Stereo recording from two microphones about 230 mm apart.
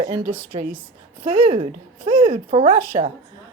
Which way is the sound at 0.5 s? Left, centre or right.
Right.